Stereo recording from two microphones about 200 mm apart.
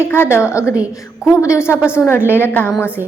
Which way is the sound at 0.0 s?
10° left (ahead or behind).